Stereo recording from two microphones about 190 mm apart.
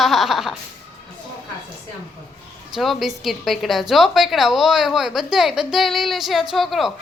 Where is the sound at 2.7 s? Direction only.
Centre (ahead or behind).